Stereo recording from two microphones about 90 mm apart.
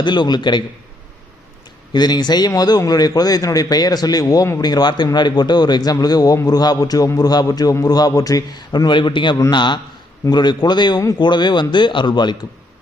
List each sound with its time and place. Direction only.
0.0 s a man's voice: 55° left (ahead or behind)
1.9 s a man's voice: 55° left (ahead or behind)